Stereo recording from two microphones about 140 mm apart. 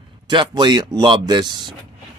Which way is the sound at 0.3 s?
35° right (ahead or behind).